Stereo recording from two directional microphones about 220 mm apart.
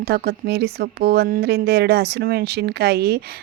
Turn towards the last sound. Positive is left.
turn(degrees=-45)  # may be behind; listen again after turning